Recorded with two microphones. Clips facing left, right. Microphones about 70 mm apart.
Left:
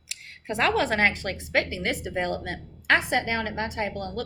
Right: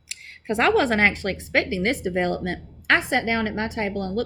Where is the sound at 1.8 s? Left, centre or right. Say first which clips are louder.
Right 5 dB; right.